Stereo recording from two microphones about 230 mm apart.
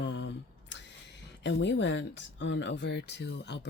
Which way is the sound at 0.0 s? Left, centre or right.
Left.